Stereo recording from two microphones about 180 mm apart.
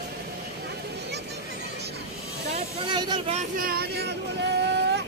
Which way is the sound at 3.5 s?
55° right (ahead or behind).